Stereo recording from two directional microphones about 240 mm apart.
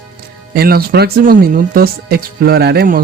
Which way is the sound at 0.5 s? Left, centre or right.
Right.